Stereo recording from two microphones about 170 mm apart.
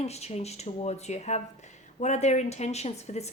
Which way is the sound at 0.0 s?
40° left (ahead or behind).